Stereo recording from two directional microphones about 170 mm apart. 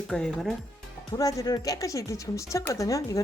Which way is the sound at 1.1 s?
20° left (ahead or behind).